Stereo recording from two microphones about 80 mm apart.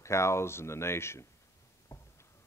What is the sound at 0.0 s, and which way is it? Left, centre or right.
Speech, left.